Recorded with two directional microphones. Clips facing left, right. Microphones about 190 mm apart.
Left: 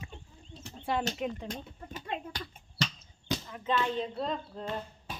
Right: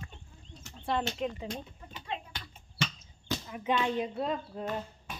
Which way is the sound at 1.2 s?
5° left (ahead or behind).